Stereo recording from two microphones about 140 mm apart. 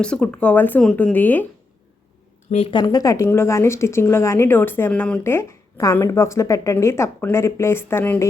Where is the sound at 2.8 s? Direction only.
25° left (ahead or behind).